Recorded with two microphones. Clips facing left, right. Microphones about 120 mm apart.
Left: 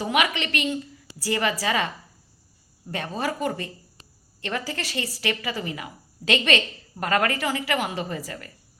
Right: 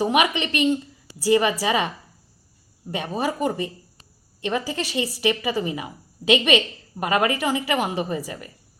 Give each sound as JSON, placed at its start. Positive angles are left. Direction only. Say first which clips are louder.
{"t": 0.0, "sound": "speech", "louder": "right 4 dB", "side_deg": -20}
{"t": 2.9, "sound": "speech", "louder": "right 3 dB", "side_deg": -20}